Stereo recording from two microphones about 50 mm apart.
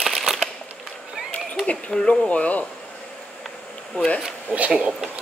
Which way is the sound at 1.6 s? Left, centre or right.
Centre.